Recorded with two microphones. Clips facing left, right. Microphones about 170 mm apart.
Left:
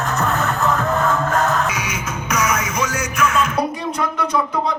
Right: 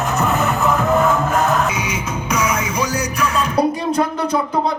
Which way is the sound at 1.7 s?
30° right (ahead or behind).